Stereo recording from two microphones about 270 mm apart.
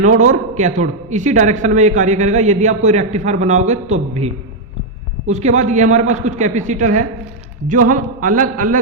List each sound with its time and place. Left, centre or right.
0.0 s a man's voice: right
5.3 s a man's voice: right